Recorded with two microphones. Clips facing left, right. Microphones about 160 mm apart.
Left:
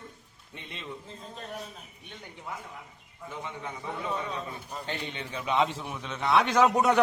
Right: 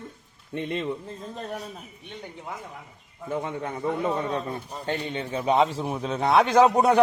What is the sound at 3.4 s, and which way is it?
A man's voice, 55° right (ahead or behind).